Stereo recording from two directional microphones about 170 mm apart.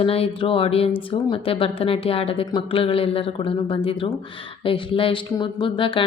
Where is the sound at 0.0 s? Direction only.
35° left (ahead or behind).